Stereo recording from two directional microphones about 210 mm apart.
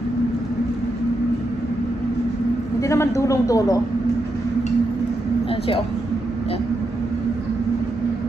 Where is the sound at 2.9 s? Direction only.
15° left (ahead or behind).